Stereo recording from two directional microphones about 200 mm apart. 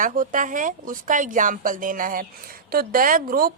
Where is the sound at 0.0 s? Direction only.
40° right (ahead or behind).